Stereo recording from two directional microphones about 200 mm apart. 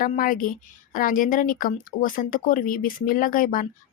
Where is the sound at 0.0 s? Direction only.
45° left (ahead or behind).